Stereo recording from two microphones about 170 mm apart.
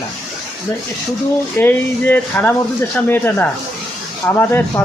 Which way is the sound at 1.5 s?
10° left (ahead or behind).